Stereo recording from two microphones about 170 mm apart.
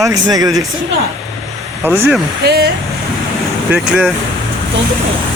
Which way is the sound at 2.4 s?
75° right (ahead or behind).